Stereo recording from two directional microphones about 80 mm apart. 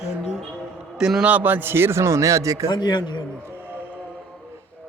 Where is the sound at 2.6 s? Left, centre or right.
Left.